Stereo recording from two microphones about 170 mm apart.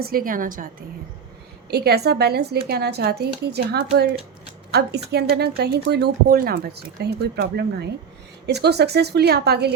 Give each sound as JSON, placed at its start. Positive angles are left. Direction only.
{"t": 0.0, "sound": "a woman's voice", "side_deg": -60}
{"t": 1.7, "sound": "speech", "side_deg": -70}